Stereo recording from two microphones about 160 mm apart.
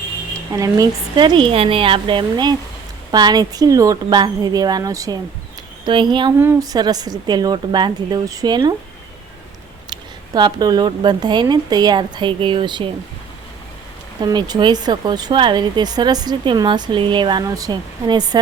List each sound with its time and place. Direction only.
0.3 s speech: 20° right (ahead or behind)
6.4 s speech: 20° right (ahead or behind)
9.9 s speech: 25° right (ahead or behind)
14.2 s speech: 25° right (ahead or behind)